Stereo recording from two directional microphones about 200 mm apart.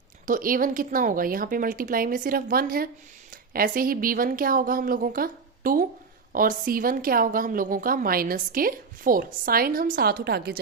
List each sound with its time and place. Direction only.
0.3 s a woman's voice: 45° right (ahead or behind)